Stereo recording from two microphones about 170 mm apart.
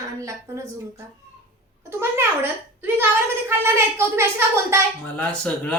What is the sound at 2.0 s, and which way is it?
Speech, 15° right (ahead or behind).